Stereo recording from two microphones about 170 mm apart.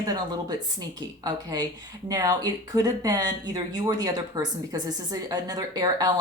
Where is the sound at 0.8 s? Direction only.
20° right (ahead or behind).